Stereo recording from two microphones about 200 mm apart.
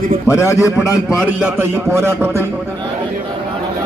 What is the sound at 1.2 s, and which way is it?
A man's voice, 10° right (ahead or behind).